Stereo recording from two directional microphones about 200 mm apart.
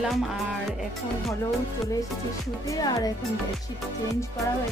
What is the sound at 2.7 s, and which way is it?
Speech, 15° left (ahead or behind).